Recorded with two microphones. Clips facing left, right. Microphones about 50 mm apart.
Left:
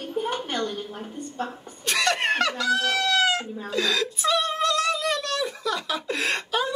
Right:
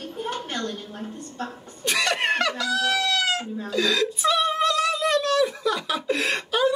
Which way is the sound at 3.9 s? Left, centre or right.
Centre.